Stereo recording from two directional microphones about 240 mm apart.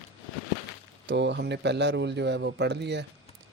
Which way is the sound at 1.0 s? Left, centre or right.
Right.